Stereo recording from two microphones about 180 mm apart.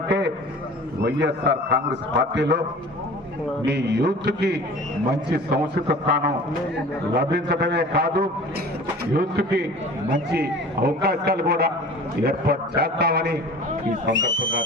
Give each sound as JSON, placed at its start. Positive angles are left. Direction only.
{"t": 1.0, "sound": "a man's voice", "side_deg": -75}
{"t": 3.7, "sound": "a man's voice", "side_deg": -70}
{"t": 14.1, "sound": "speech", "side_deg": -90}